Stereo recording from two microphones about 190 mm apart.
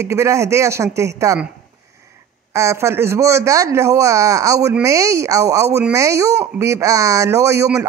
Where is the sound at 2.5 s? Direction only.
15° right (ahead or behind).